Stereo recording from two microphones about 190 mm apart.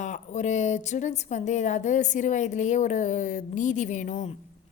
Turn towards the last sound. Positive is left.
turn(degrees=40)  # may be behind; listen again after turning